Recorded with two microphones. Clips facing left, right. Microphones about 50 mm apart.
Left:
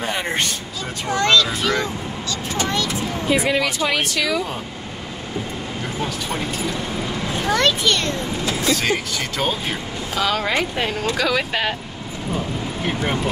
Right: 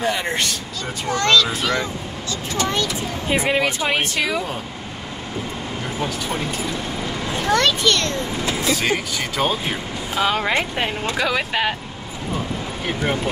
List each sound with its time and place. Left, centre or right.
0.0 s speech: left
1.0 s speech: centre
2.7 s speech: right
5.9 s speech: centre
7.4 s a child's voice: centre
8.7 s speech: centre
10.1 s speech: right